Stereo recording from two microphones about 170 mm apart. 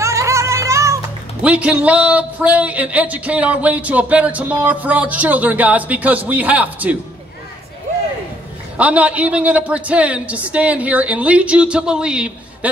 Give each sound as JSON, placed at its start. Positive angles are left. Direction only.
{"t": 0.0, "sound": "music", "side_deg": -15}
{"t": 1.4, "sound": "speech", "side_deg": -5}
{"t": 8.7, "sound": "speech", "side_deg": -10}